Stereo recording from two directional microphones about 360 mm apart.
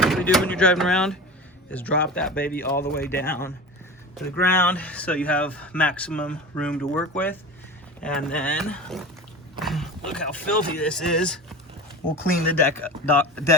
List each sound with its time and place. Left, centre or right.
0.0 s speech: centre
2.8 s speech: left
3.2 s speech: centre
8.0 s speech: centre